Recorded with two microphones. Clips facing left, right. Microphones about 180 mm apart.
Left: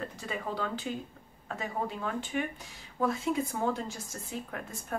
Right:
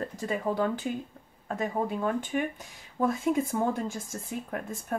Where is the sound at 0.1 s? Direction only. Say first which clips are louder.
Right 6 dB; 45° right (ahead or behind).